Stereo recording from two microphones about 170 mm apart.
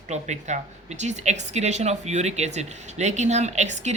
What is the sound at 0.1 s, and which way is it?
Speech, 45° right (ahead or behind).